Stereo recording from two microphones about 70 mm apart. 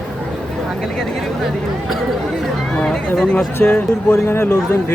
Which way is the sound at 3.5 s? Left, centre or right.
Left.